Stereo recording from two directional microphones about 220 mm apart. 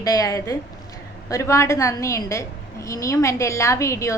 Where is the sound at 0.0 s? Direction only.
15° left (ahead or behind).